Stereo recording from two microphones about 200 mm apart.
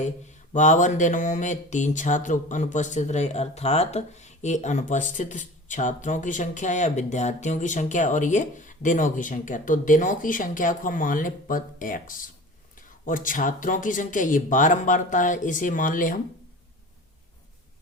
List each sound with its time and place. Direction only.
0.5 s mantra: 35° left (ahead or behind)